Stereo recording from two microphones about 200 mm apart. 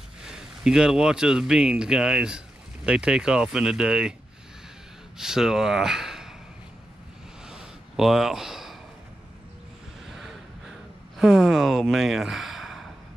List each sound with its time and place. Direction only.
0.2 s speech: 5° right (ahead or behind)
5.1 s speech: 5° right (ahead or behind)
7.4 s a sound: centre (ahead or behind)
10.0 s vehicle: centre (ahead or behind)
11.1 s speech: centre (ahead or behind)